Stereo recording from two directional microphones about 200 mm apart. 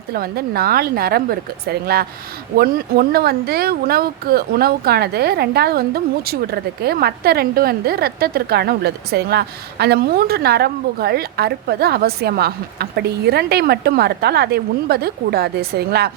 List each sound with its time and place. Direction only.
0.1 s speech: 50° right (ahead or behind)